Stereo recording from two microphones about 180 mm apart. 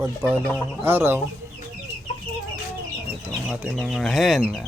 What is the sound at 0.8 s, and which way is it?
Speech, 10° right (ahead or behind).